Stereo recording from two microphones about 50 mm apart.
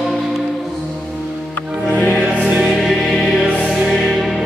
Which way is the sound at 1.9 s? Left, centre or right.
Left.